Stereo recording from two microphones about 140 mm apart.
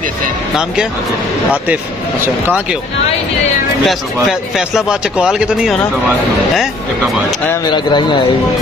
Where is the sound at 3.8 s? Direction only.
Centre (ahead or behind).